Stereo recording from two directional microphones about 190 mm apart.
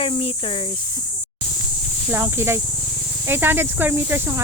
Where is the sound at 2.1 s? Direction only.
10° right (ahead or behind).